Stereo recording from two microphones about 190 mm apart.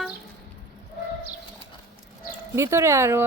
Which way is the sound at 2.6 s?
15° right (ahead or behind).